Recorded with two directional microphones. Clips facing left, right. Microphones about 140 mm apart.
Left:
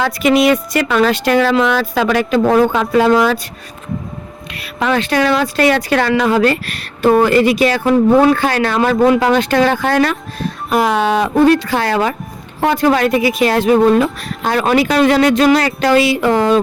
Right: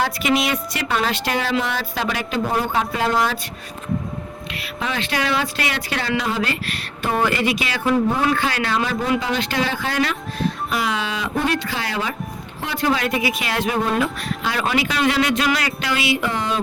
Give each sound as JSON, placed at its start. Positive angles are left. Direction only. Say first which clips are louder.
{"t": 0.2, "sound": "a woman's voice", "louder": "left 9 dB", "side_deg": 50}
{"t": 2.1, "sound": "speech", "louder": "left 10 dB", "side_deg": 55}
{"t": 2.5, "sound": "speech", "louder": "left 9 dB", "side_deg": 90}
{"t": 4.9, "sound": "a woman's voice", "louder": "left 7 dB", "side_deg": 45}
{"t": 6.5, "sound": "a woman's voice", "louder": "left 7 dB", "side_deg": 40}
{"t": 9.0, "sound": "speech", "louder": "left 10 dB", "side_deg": 85}
{"t": 9.4, "sound": "a woman's voice", "louder": "left 9 dB", "side_deg": 50}
{"t": 11.3, "sound": "speech", "louder": "left 11 dB", "side_deg": 40}
{"t": 11.7, "sound": "speech", "louder": "left 10 dB", "side_deg": 55}
{"t": 12.5, "sound": "speech", "louder": "left 9 dB", "side_deg": 45}